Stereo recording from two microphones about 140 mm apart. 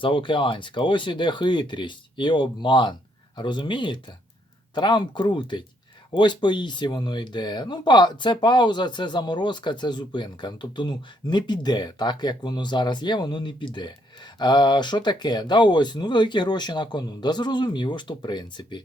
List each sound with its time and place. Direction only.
0.0 s speech: 35° left (ahead or behind)